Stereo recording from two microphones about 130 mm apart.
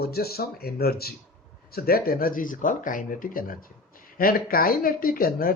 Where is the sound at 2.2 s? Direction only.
90° left.